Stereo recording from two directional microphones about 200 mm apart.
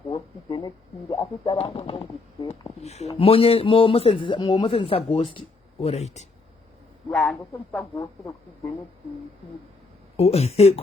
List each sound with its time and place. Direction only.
0.1 s a man's voice: 20° left (ahead or behind)
7.1 s speech: 5° left (ahead or behind)
10.2 s speech: 30° left (ahead or behind)